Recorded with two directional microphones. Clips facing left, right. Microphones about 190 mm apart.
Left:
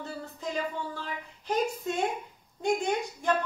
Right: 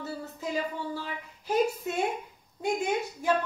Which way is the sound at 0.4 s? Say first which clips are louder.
Even; 10° right (ahead or behind).